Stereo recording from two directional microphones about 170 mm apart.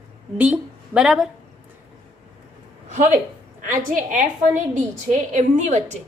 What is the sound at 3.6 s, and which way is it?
A woman's voice, 50° right (ahead or behind).